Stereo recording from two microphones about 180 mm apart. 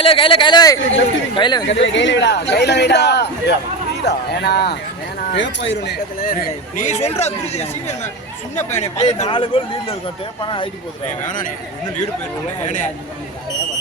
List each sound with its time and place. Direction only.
0.0 s speech: 30° left (ahead or behind)
1.6 s speech: 90° left; by 4.8 s 65° left (ahead or behind)
5.3 s speech: 85° left
6.7 s a man's voice: 40° left (ahead or behind)
11.3 s speech: 45° left (ahead or behind)
12.6 s speech: 45° left (ahead or behind)